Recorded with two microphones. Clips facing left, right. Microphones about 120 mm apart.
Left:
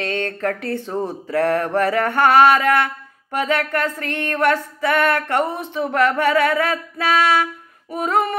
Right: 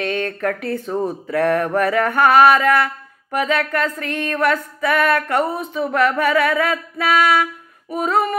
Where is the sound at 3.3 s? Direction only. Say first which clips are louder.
Right 1 dB; 30° left (ahead or behind).